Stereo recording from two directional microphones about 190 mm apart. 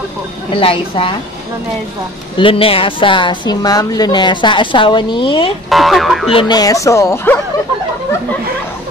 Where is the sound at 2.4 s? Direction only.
30° left (ahead or behind).